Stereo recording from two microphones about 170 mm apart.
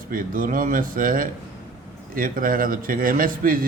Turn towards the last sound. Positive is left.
turn(degrees=-55)  # may be behind; listen again after turning